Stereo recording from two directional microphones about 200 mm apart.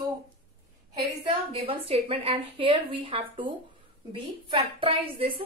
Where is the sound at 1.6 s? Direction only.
30° right (ahead or behind).